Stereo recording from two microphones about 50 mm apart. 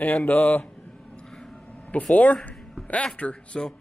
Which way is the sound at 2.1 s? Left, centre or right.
Left.